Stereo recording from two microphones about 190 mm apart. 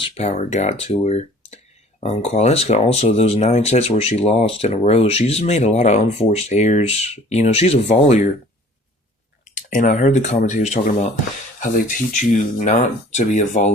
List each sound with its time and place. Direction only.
0.0 s speech: 35° left (ahead or behind)
9.6 s speech: 45° left (ahead or behind)